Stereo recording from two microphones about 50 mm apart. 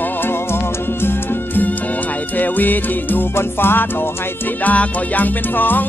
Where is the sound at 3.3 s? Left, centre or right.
Left.